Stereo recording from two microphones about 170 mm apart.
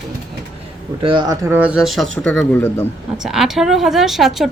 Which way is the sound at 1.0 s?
25° right (ahead or behind).